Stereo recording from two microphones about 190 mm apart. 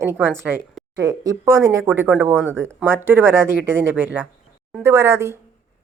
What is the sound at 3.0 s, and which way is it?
Speech, 10° right (ahead or behind).